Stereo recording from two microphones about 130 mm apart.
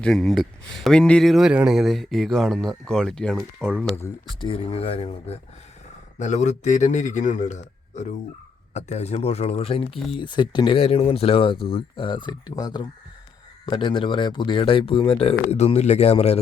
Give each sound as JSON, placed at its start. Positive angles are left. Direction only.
{"t": 0.0, "sound": "speech", "side_deg": 5}
{"t": 4.4, "sound": "speech", "side_deg": 45}
{"t": 6.1, "sound": "a man's voice", "side_deg": 65}